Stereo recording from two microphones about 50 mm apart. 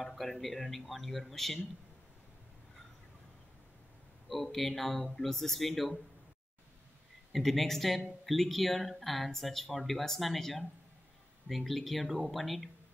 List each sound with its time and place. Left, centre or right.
0.0 s speech: centre
4.3 s speech: centre
7.3 s speech: centre